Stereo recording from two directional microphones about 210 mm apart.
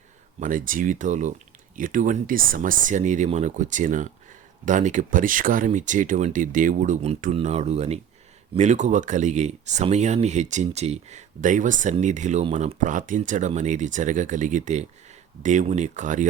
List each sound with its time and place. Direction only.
0.3 s speech: 40° right (ahead or behind)